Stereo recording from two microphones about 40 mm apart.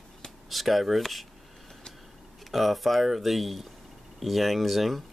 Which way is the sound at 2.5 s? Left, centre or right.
Centre.